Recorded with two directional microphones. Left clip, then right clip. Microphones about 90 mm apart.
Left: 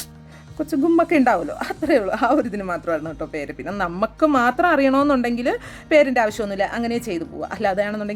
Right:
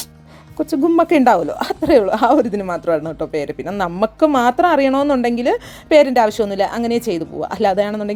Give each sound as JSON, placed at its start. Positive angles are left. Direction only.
{"t": 0.6, "sound": "a woman's voice", "side_deg": -50}